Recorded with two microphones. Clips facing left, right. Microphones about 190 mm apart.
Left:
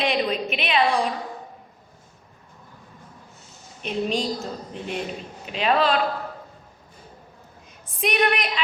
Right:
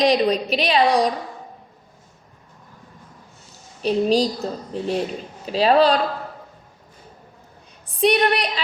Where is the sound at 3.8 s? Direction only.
35° right (ahead or behind).